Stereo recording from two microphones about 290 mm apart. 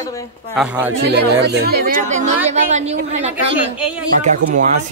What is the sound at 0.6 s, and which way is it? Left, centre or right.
Speech, centre.